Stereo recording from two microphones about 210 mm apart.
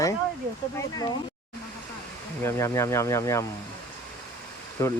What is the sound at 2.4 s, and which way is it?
Speech, 15° left (ahead or behind).